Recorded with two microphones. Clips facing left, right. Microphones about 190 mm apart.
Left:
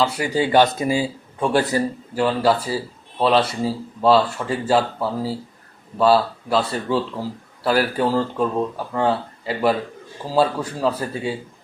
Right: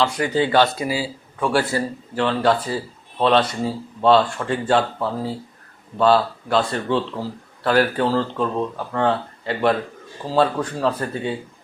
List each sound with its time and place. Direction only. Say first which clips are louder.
0.0 s speech: even; 10° left (ahead or behind)
2.1 s speech: even; 5° left (ahead or behind)